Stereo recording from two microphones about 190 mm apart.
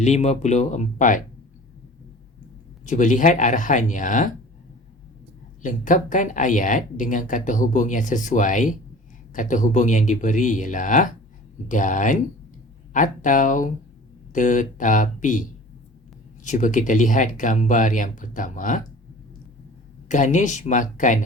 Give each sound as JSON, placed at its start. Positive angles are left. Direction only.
{"t": 0.0, "sound": "speech", "side_deg": 35}
{"t": 2.8, "sound": "speech", "side_deg": 40}
{"t": 5.6, "sound": "speech", "side_deg": 45}
{"t": 20.1, "sound": "speech", "side_deg": 40}